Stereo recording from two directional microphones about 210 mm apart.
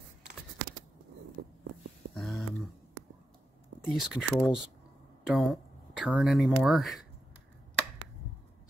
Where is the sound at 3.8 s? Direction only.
Centre (ahead or behind).